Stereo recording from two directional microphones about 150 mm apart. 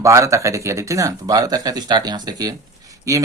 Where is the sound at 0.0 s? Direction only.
20° right (ahead or behind).